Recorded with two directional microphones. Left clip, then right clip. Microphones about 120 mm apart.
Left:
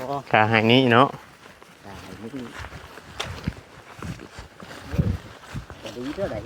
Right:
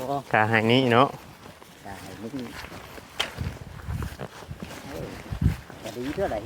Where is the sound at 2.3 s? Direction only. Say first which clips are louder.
Left 1 dB; 50° right (ahead or behind).